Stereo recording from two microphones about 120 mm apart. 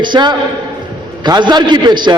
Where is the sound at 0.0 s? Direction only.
40° right (ahead or behind).